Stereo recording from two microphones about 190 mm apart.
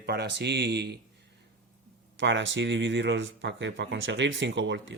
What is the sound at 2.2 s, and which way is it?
Speech, 75° right (ahead or behind).